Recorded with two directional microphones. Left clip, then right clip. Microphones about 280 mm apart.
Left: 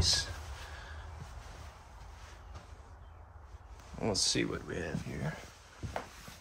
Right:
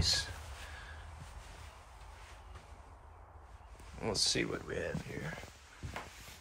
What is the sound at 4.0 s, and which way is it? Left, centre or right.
Speech, centre.